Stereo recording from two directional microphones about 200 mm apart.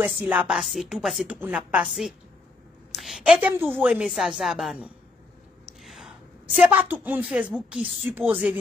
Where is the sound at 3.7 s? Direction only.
5° right (ahead or behind).